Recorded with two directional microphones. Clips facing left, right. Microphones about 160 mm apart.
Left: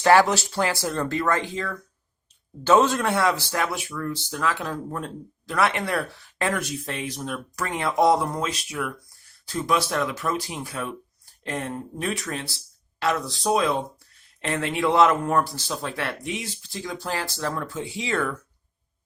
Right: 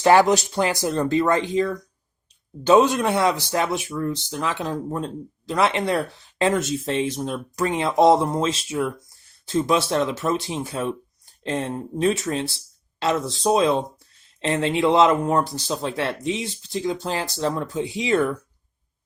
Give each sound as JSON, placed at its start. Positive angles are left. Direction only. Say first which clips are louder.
{"t": 0.0, "sound": "speech", "louder": "right 2 dB", "side_deg": -20}